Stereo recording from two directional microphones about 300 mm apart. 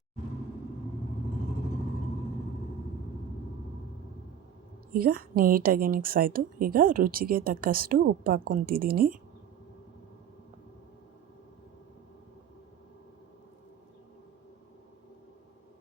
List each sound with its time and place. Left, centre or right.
4.9 s a woman's voice: right